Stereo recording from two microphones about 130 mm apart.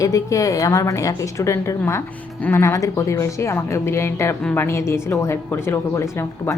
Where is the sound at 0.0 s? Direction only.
25° left (ahead or behind).